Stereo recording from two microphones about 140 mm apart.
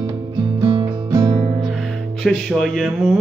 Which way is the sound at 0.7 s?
30° right (ahead or behind).